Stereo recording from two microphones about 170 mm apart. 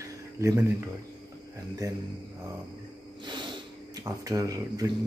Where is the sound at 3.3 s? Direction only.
25° right (ahead or behind).